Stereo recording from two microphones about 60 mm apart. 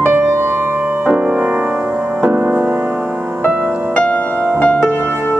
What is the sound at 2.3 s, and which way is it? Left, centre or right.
Music, right.